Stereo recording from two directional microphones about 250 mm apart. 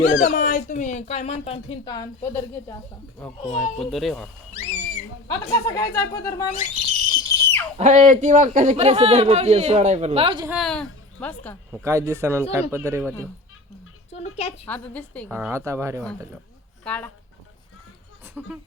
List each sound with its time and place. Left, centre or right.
0.0 s speech: left; by 2.7 s centre
3.4 s speech: left
3.8 s speech: centre
4.5 s music: left
5.3 s speech: centre
7.1 s a sound: centre
7.8 s a man's voice: right
10.5 s a woman's voice: centre
11.9 s speech: centre
14.1 s speech: left
14.7 s speech: centre
15.3 s speech: centre
16.8 s speech: centre